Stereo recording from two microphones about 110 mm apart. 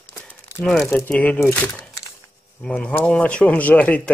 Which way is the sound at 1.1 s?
15° left (ahead or behind).